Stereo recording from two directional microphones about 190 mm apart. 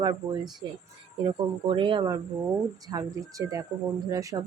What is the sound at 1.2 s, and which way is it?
Speech, 25° right (ahead or behind).